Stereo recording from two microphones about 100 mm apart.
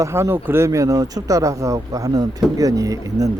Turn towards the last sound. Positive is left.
turn(degrees=-35)  # may be behind; listen again after turning